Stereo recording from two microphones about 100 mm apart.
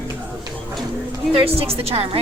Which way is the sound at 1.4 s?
75° right (ahead or behind).